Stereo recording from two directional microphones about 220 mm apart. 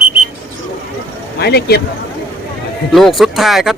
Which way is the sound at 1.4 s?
45° left (ahead or behind).